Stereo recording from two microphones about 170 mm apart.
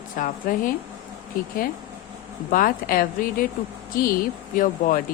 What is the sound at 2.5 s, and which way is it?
Speech, 55° left (ahead or behind).